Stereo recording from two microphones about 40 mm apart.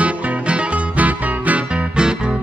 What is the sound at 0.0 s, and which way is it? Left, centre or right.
Music, right.